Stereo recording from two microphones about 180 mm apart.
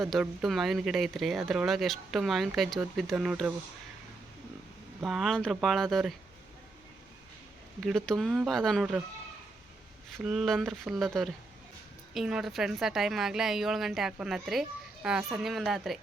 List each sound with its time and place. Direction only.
0.0 s speech: centre (ahead or behind)
5.0 s speech: centre (ahead or behind)
7.8 s speech: centre (ahead or behind)
10.2 s speech: centre (ahead or behind)